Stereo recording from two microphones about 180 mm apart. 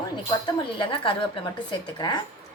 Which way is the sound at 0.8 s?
30° left (ahead or behind).